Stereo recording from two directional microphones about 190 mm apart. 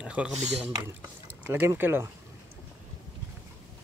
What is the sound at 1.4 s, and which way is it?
Speech, 10° right (ahead or behind).